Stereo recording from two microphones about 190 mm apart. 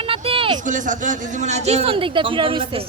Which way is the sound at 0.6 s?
40° right (ahead or behind).